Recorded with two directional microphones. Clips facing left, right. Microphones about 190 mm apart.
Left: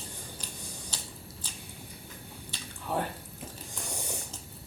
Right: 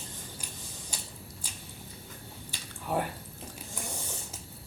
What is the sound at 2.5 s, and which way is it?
Drip, 10° right (ahead or behind).